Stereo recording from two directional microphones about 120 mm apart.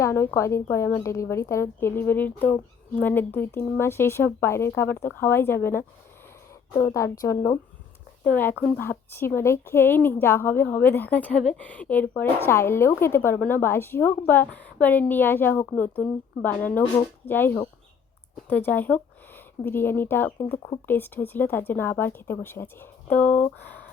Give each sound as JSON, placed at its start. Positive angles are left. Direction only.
{"t": 0.0, "sound": "a woman's voice", "side_deg": 25}
{"t": 16.8, "sound": "speech", "side_deg": 50}
{"t": 17.2, "sound": "a woman's voice", "side_deg": 15}